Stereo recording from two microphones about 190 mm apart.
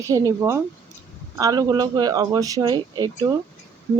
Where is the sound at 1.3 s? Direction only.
20° right (ahead or behind).